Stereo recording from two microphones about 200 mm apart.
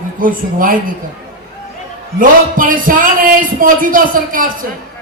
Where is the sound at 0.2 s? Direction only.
45° right (ahead or behind).